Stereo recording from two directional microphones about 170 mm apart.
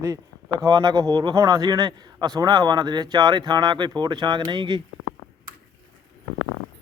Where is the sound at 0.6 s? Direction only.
25° right (ahead or behind).